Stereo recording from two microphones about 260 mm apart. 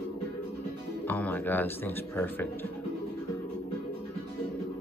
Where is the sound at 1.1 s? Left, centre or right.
Centre.